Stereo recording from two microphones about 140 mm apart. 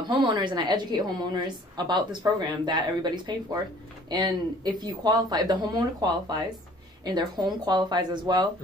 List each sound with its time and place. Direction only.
0.1 s a woman's voice: 35° right (ahead or behind)